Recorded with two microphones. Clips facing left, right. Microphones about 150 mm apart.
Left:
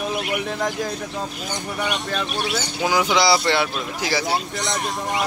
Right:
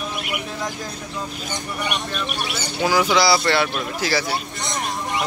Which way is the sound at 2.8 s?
20° left (ahead or behind).